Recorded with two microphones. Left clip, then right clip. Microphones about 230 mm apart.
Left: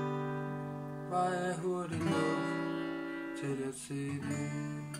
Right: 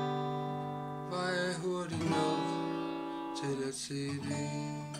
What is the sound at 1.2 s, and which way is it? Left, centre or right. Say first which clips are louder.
Music: right 3 dB; centre.